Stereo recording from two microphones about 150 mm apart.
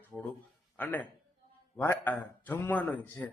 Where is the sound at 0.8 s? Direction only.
10° left (ahead or behind).